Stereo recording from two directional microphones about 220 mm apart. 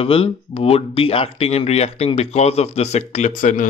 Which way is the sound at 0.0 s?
25° left (ahead or behind).